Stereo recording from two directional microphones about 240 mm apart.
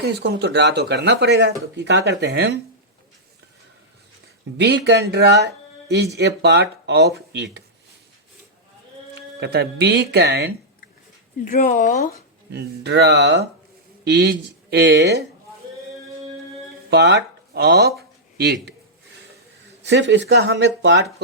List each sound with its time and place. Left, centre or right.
0.0 s speech: right
4.5 s speech: right
9.4 s speech: right
11.4 s speech: left
12.5 s speech: right
16.9 s speech: right
19.8 s speech: right